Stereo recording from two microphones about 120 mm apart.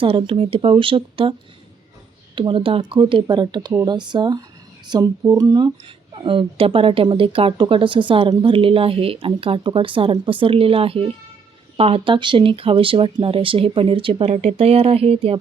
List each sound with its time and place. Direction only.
0.0 s speech: 45° right (ahead or behind)
6.1 s speech: 45° right (ahead or behind)